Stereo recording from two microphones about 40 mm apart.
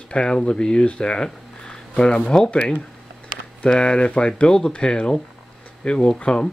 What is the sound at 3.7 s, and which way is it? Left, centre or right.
Speech, left.